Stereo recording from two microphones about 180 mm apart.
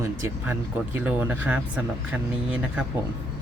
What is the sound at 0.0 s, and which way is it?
Speech, 15° right (ahead or behind).